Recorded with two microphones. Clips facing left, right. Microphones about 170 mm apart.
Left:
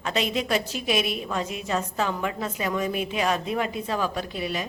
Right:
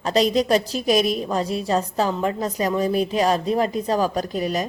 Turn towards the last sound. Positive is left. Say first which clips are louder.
# right 6 dB
turn(degrees=-40)  # may be behind; listen again after turning